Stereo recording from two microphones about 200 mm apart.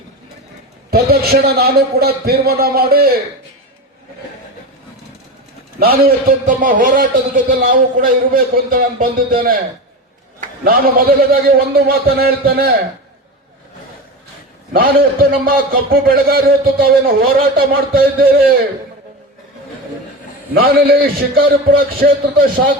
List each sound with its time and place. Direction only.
0.9 s a man's voice: 50° right (ahead or behind)
5.8 s a man's voice: 50° right (ahead or behind)
10.6 s a man's voice: 45° right (ahead or behind)
14.7 s a man's voice: 50° right (ahead or behind)
20.5 s a man's voice: 50° right (ahead or behind)